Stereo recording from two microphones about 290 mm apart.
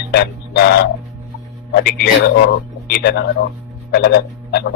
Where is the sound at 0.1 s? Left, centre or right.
Left.